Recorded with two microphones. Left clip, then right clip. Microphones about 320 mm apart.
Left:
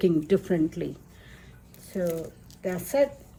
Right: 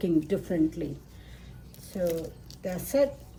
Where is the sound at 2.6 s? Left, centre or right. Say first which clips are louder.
Left 2 dB; left.